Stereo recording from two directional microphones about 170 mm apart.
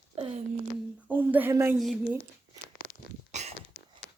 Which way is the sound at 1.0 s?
10° right (ahead or behind).